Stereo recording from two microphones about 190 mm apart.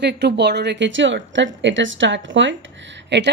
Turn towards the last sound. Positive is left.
turn(degrees=-65)  # may be behind; listen again after turning